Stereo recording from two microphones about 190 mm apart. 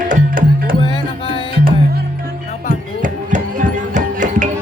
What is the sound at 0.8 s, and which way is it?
Music, 20° left (ahead or behind).